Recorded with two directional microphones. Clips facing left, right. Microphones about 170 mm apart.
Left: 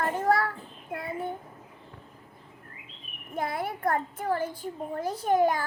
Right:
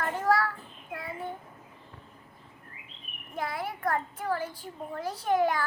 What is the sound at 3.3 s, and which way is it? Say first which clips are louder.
A child's voice: left 3 dB; 55° left (ahead or behind).